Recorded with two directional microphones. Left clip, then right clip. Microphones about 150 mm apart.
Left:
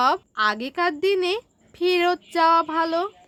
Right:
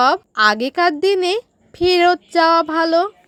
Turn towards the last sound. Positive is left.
turn(degrees=-30)  # may be behind; listen again after turning